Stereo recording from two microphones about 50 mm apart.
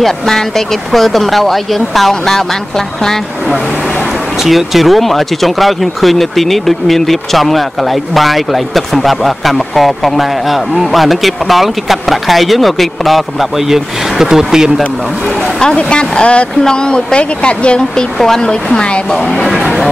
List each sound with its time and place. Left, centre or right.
0.0 s speech: centre
4.4 s speech: centre
15.6 s speech: centre
19.1 s speech: centre